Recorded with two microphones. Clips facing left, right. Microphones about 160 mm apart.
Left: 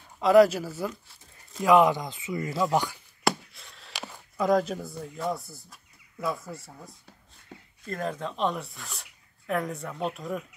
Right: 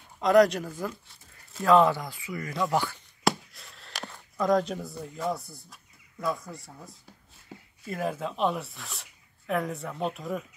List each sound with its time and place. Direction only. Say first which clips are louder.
0.2 s speech: left 2 dB; 5° left (ahead or behind)
3.3 s speech: even; centre (ahead or behind)